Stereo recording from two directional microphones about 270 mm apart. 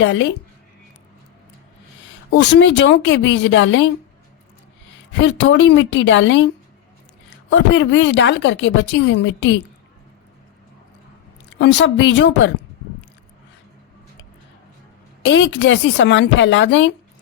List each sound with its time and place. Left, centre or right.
0.0 s a woman's voice: left
2.0 s a woman's voice: left
5.1 s a woman's voice: left
7.5 s a woman's voice: left
11.6 s a woman's voice: left
15.2 s a woman's voice: left